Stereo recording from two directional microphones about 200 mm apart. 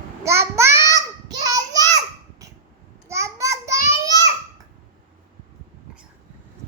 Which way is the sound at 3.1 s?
15° right (ahead or behind).